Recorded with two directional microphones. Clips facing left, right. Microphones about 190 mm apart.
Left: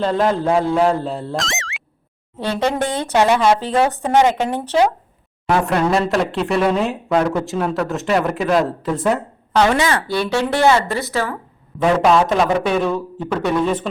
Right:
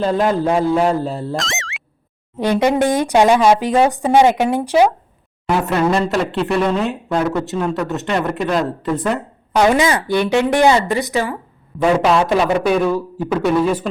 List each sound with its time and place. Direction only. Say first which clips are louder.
0.0 s speech: right 1 dB; 5° right (ahead or behind)
2.4 s speech: right 5 dB; 15° right (ahead or behind)
9.5 s speech: right 2 dB; 15° right (ahead or behind)
11.8 s speech: even; centre (ahead or behind)